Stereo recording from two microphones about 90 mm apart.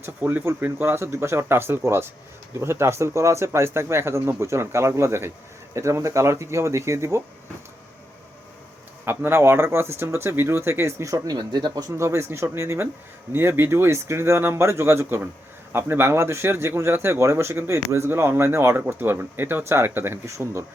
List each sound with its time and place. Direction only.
0.2 s speech: 25° right (ahead or behind)
9.0 s speech: 25° right (ahead or behind)